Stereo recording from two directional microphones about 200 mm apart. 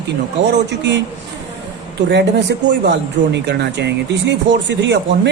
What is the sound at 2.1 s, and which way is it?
Speech, 60° right (ahead or behind).